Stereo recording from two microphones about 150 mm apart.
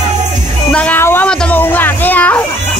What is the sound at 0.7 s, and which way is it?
Music, 10° left (ahead or behind).